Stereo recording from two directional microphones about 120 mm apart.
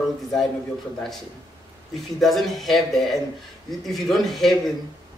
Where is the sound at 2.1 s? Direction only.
Centre (ahead or behind).